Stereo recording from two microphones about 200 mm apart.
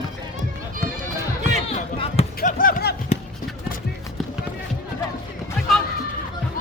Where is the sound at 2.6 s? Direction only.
45° left (ahead or behind).